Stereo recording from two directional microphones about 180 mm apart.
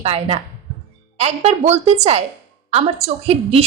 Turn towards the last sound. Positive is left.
turn(degrees=-35)  # may be behind; listen again after turning